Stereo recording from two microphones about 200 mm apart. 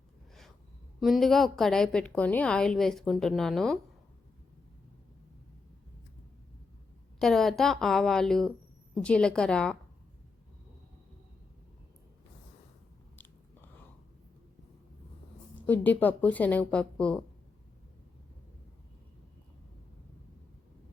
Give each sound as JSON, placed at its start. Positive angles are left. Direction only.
{"t": 0.9, "sound": "a woman's voice", "side_deg": 0}
{"t": 7.2, "sound": "a woman's voice", "side_deg": 0}
{"t": 15.5, "sound": "speech", "side_deg": 10}